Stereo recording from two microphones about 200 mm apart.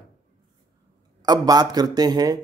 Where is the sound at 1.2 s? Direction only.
20° right (ahead or behind).